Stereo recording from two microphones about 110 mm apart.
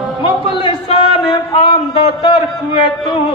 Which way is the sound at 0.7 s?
55° left (ahead or behind).